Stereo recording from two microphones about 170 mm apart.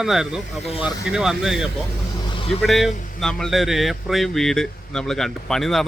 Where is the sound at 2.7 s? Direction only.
Centre (ahead or behind).